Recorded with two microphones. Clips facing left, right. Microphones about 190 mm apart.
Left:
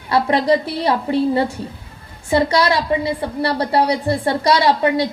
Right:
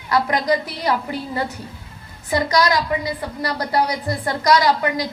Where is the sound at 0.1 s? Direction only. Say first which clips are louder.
Left 4 dB; 30° left (ahead or behind).